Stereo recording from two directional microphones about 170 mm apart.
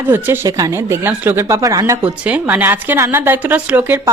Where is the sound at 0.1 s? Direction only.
15° right (ahead or behind).